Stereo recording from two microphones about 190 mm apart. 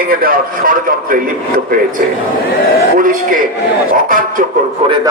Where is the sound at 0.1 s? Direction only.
50° right (ahead or behind).